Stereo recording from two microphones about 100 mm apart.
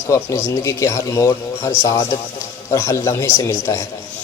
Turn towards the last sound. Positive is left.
turn(degrees=30)  # may be behind; listen again after turning